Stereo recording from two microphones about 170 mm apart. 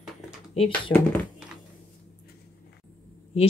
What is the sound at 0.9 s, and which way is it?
Speech, 10° left (ahead or behind).